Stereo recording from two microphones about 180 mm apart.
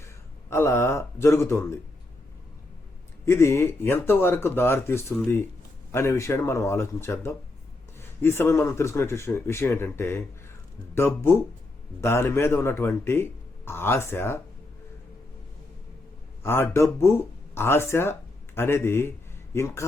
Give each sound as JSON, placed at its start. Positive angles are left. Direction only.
{"t": 0.5, "sound": "speech", "side_deg": 15}
{"t": 3.2, "sound": "speech", "side_deg": 15}
{"t": 16.4, "sound": "speech", "side_deg": 15}